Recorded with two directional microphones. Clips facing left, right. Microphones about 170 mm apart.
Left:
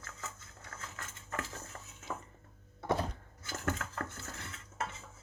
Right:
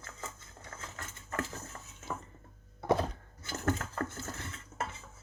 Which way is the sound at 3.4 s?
35° right (ahead or behind).